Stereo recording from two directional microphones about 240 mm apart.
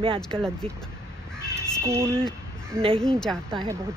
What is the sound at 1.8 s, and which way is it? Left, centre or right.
Speech, centre.